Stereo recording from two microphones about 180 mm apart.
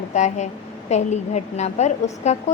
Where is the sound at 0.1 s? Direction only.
40° left (ahead or behind).